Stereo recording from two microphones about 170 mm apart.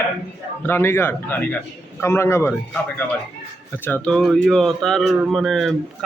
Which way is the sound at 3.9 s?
10° left (ahead or behind).